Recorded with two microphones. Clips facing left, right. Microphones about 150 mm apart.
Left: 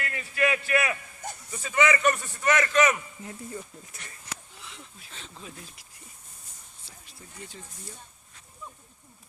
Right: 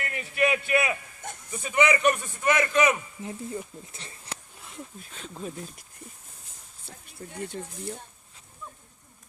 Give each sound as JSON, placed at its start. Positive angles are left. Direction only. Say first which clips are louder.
{"t": 0.0, "sound": "a man's voice", "louder": "right 2 dB", "side_deg": -20}
{"t": 4.6, "sound": "a sound", "louder": "right 5 dB", "side_deg": -50}
{"t": 5.4, "sound": "speech", "louder": "right 11 dB", "side_deg": -45}
{"t": 6.8, "sound": "speech", "louder": "right 9 dB", "side_deg": -60}